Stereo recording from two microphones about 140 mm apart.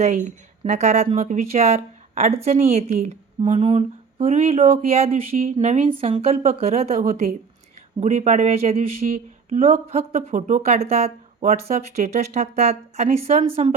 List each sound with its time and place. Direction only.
0.0 s speech: 60° right (ahead or behind)
8.0 s speech: 60° right (ahead or behind)
9.0 s speech: 75° right (ahead or behind)
9.8 s speech: 50° right (ahead or behind)